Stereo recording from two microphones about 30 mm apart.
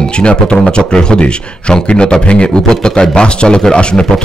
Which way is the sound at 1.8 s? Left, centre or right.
Left.